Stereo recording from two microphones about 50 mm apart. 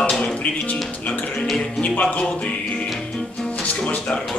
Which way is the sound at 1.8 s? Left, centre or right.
Left.